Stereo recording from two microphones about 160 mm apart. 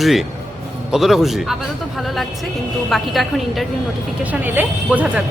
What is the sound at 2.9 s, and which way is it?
Speech, centre (ahead or behind).